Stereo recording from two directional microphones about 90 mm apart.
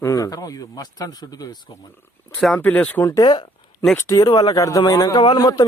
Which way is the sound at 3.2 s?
55° left (ahead or behind).